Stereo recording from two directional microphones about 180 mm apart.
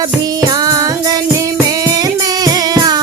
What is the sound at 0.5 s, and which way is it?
Music, 20° right (ahead or behind).